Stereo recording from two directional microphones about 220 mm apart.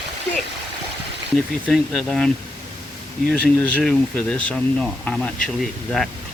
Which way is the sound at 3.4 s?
5° left (ahead or behind).